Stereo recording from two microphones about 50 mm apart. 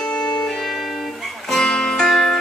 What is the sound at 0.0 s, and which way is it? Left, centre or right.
Music, centre.